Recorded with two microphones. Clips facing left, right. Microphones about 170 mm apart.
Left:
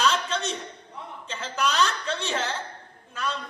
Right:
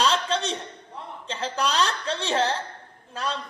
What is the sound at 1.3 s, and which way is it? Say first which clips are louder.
Speech: right 1 dB; 30° right (ahead or behind).